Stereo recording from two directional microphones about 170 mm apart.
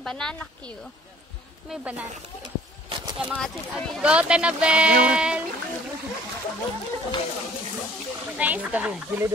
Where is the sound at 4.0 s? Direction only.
5° right (ahead or behind).